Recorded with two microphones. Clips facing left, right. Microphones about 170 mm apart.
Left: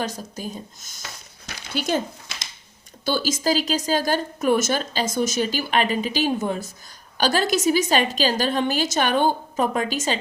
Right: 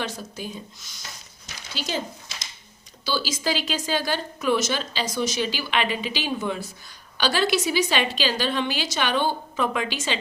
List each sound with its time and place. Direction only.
0.0 s a woman's voice: 40° left (ahead or behind)
1.5 s a sound: 55° left (ahead or behind)
3.0 s a woman's voice: 50° left (ahead or behind)